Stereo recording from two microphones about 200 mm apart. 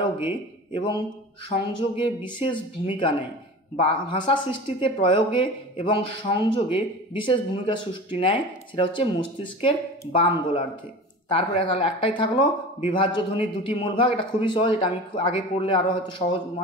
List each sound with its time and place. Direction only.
0.7 s speech: 25° left (ahead or behind)